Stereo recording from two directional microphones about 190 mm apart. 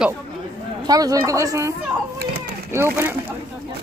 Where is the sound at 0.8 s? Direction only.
20° right (ahead or behind).